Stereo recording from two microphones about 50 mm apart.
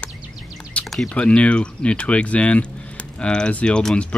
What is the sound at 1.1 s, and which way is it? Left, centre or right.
Speech, left.